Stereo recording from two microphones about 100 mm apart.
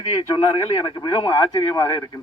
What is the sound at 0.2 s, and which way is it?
Speech, 60° left (ahead or behind).